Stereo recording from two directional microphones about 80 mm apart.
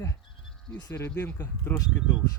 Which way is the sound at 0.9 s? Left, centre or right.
Left.